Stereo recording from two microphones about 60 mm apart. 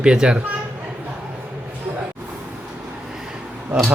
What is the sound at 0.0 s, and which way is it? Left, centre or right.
Speech, centre.